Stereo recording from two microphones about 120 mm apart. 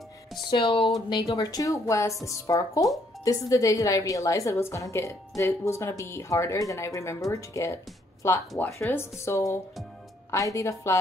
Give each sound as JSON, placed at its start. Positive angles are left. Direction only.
{"t": 0.5, "sound": "speech", "side_deg": 45}
{"t": 1.3, "sound": "a woman's voice", "side_deg": 30}